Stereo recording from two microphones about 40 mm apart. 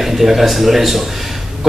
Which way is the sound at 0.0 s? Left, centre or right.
Centre.